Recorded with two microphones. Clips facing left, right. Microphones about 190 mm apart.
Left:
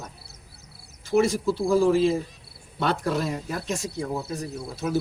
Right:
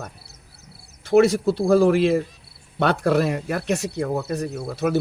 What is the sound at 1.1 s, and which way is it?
Speech, 65° right (ahead or behind).